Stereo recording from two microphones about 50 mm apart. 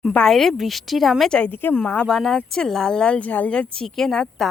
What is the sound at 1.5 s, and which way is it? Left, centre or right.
Speech, left.